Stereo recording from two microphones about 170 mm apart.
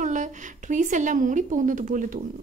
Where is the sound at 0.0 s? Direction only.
45° right (ahead or behind).